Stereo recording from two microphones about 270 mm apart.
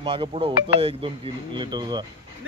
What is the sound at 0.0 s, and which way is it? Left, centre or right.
A man's voice, centre.